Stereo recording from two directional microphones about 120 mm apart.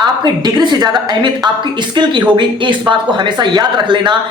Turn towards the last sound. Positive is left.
turn(degrees=-40)  # may be behind; listen again after turning